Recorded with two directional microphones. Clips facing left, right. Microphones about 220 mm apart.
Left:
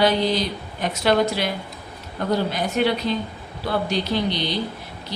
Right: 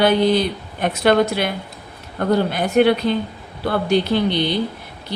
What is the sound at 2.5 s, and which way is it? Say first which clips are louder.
A woman's voice: right 6 dB; 55° right (ahead or behind).